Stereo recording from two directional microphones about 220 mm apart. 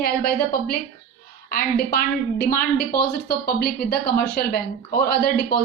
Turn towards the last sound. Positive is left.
turn(degrees=45)  # may be behind; listen again after turning